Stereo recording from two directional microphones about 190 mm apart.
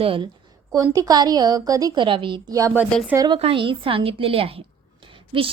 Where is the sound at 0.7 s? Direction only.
15° right (ahead or behind).